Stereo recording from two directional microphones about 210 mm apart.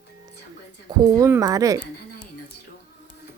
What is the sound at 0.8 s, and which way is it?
Speech, 15° right (ahead or behind).